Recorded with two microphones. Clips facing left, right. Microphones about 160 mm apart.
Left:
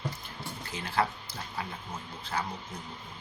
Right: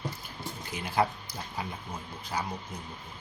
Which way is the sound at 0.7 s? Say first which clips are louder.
Right 2 dB; 15° right (ahead or behind).